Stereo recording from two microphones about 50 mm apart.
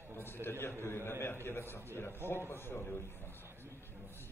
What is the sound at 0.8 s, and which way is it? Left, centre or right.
A man's voice, left.